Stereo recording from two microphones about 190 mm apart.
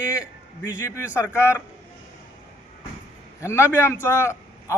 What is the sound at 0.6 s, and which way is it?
A man's voice, 15° left (ahead or behind).